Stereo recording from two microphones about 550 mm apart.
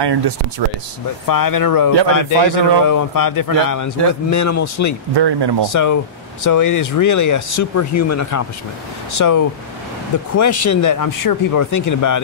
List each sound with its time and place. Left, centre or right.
0.0 s speech: right
1.2 s speech: left
5.1 s speech: right
5.7 s speech: left